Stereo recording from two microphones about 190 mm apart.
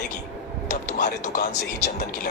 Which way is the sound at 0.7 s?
40° left (ahead or behind).